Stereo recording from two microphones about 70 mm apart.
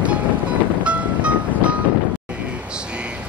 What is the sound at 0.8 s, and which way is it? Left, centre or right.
Music, centre.